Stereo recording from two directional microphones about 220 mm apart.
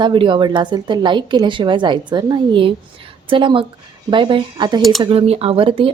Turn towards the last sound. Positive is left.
turn(degrees=-25)  # may be behind; listen again after turning